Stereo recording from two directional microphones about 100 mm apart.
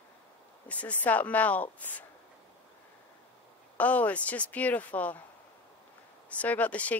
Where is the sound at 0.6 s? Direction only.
15° left (ahead or behind).